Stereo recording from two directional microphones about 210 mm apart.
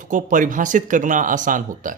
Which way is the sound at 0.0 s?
40° right (ahead or behind).